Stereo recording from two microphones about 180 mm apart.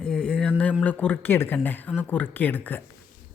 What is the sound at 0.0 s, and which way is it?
Speech, 5° left (ahead or behind).